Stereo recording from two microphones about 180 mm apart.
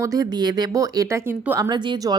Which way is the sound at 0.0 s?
20° right (ahead or behind).